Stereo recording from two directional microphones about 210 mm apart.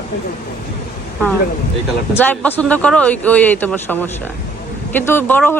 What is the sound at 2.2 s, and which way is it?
Speech, 10° left (ahead or behind).